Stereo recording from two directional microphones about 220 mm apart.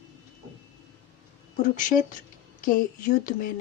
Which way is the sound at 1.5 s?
35° left (ahead or behind).